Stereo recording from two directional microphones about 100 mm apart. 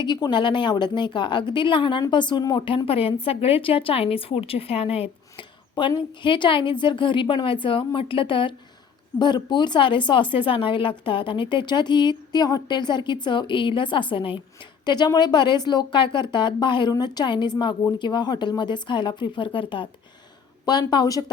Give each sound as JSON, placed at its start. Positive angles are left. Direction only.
{"t": 0.0, "sound": "a woman's voice", "side_deg": 45}
{"t": 5.4, "sound": "a sound", "side_deg": 55}
{"t": 6.2, "sound": "a woman's voice", "side_deg": 55}
{"t": 9.1, "sound": "a woman's voice", "side_deg": 45}
{"t": 20.7, "sound": "a woman's voice", "side_deg": 45}